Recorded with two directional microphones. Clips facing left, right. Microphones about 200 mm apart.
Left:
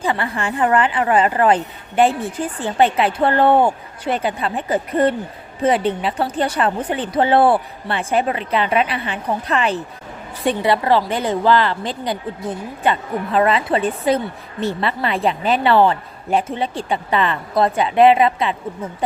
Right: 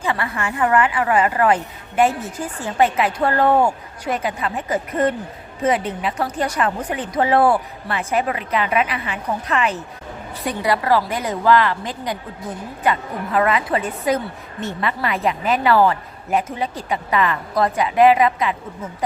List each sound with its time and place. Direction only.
0.0 s a woman's voice: 30° left (ahead or behind)